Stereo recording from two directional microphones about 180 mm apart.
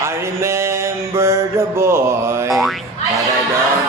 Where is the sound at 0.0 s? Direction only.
15° right (ahead or behind).